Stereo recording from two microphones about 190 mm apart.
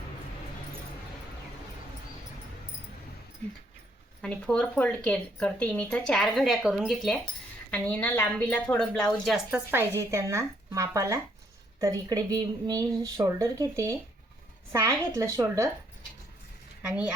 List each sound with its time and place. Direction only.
4.2 s a woman's voice: 5° left (ahead or behind); by 13.9 s 15° right (ahead or behind)
15.1 s speech: 15° right (ahead or behind)
16.8 s speech: 5° right (ahead or behind)